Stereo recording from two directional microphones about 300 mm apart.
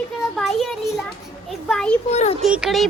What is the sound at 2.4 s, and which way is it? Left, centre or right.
Speech, centre.